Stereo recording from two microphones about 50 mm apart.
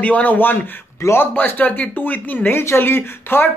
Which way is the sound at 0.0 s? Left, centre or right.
Left.